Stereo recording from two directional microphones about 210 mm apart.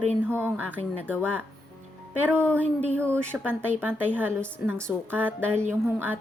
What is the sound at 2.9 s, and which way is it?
A woman's voice, 10° right (ahead or behind).